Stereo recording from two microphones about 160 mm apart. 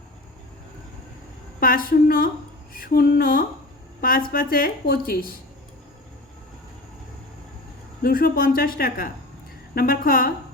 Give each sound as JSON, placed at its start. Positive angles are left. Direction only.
{"t": 1.5, "sound": "a woman's voice", "side_deg": 65}
{"t": 8.0, "sound": "a woman's voice", "side_deg": 65}